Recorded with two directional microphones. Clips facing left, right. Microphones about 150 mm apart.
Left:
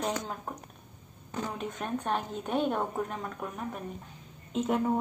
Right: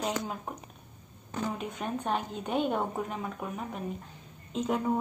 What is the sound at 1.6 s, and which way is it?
Speech, centre (ahead or behind).